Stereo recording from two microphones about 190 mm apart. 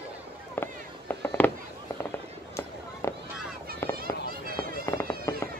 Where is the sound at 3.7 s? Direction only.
55° right (ahead or behind).